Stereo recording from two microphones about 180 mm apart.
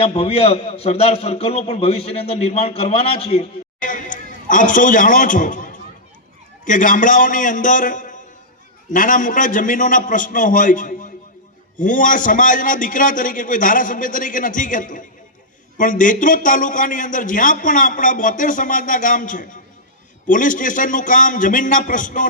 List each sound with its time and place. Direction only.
0.0 s a man's voice: 35° left (ahead or behind)